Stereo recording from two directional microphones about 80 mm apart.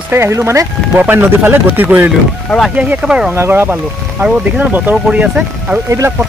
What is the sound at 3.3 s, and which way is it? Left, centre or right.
Speech, right.